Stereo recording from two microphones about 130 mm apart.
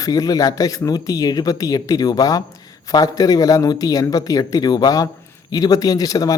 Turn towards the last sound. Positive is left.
turn(degrees=30)  # may be behind; listen again after turning